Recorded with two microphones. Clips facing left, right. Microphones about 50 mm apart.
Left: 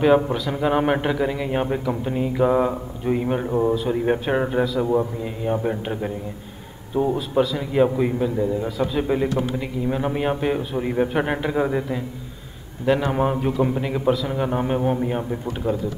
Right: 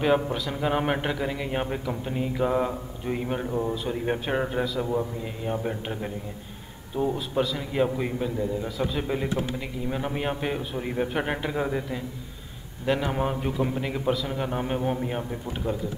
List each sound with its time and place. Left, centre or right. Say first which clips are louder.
0.0 s a man's voice: left 6 dB; centre
3.4 s a man's voice: left 9 dB; left
3.9 s a man's voice: left 6 dB; centre
7.2 s a man's voice: left 6 dB; centre